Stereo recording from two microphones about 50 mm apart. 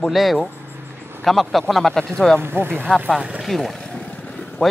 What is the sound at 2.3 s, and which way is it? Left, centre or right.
Speech, right.